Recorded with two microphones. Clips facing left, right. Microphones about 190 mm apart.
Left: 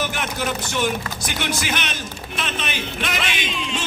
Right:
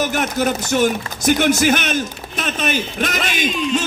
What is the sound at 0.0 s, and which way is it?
Speech, 45° right (ahead or behind).